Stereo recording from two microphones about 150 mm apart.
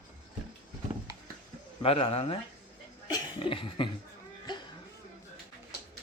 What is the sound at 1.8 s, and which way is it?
Speech, 40° left (ahead or behind).